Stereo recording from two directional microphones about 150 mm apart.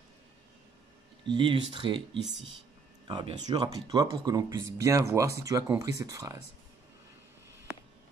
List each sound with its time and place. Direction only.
1.2 s speech: 35° right (ahead or behind)
3.1 s speech: 30° right (ahead or behind)